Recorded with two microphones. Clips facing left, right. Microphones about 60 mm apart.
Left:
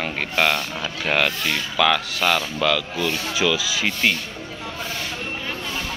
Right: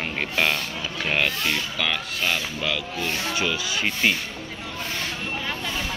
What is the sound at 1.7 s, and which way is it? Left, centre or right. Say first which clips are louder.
Speech: left 7 dB; left.